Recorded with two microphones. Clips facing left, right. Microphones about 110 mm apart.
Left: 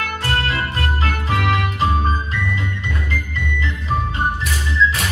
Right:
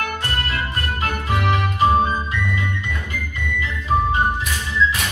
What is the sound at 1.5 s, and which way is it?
Music, 15° right (ahead or behind).